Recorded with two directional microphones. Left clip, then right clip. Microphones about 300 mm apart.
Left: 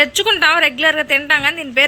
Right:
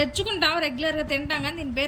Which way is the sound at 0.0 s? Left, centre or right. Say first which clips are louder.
Left 10 dB; centre.